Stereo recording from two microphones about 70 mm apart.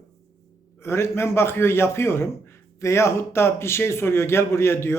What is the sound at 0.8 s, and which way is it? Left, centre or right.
A man's voice, left.